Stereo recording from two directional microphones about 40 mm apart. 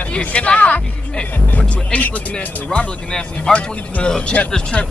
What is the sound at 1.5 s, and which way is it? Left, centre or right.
Music, left.